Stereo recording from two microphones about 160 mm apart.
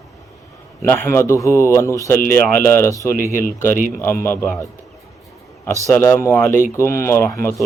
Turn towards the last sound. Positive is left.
turn(degrees=15)  # may be behind; listen again after turning